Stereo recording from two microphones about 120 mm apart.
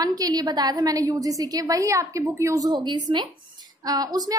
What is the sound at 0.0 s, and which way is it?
A woman's voice, 30° right (ahead or behind).